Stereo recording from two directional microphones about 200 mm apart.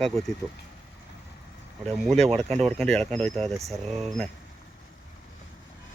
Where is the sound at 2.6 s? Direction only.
5° left (ahead or behind).